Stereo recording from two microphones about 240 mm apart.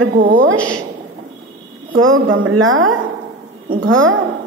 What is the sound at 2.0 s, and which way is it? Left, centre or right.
Speech, right.